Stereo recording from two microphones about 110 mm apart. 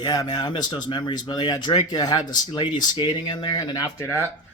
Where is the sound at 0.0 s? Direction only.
35° left (ahead or behind).